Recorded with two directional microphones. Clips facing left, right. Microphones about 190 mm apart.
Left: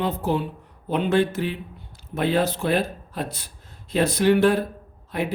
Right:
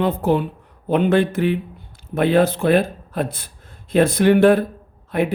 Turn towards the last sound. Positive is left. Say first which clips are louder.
# right 6 dB
turn(degrees=-55)  # may be behind; listen again after turning